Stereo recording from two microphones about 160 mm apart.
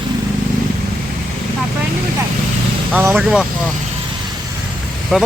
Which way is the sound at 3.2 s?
5° right (ahead or behind).